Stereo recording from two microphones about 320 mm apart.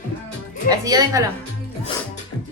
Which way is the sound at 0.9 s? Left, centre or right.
Centre.